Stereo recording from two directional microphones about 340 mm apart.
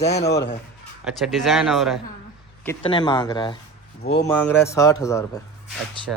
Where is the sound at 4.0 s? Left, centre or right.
Left.